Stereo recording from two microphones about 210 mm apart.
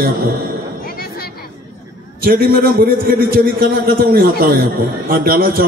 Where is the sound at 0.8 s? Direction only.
45° left (ahead or behind).